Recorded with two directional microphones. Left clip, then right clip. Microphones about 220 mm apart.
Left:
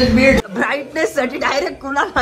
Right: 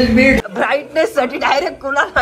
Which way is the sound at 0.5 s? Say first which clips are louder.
Right 3 dB; 15° left (ahead or behind).